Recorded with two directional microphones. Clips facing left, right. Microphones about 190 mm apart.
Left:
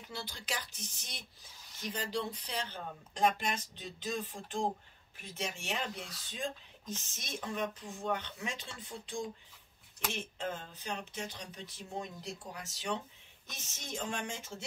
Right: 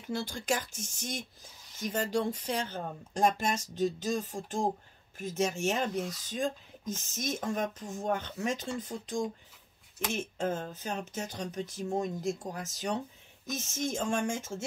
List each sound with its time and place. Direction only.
0.1 s speech: 50° right (ahead or behind)